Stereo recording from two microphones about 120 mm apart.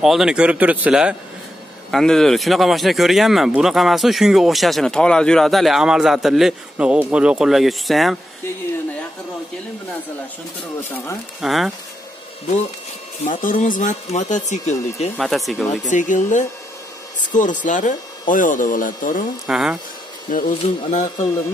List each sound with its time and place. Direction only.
0.0 s speech: 5° right (ahead or behind)
1.9 s speech: 5° left (ahead or behind)
10.8 s speech: 20° left (ahead or behind)
11.4 s speech: centre (ahead or behind)
13.2 s speech: 90° left
15.1 s speech: centre (ahead or behind)
15.7 s speech: 90° left
19.4 s speech: 5° right (ahead or behind)
20.4 s speech: 90° left